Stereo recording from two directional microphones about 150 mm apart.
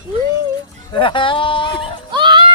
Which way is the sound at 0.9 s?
35° left (ahead or behind).